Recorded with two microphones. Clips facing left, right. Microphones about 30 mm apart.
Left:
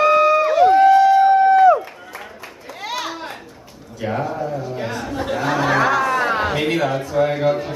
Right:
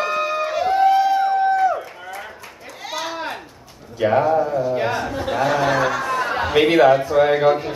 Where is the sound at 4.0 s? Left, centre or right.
Right; by 6.6 s centre.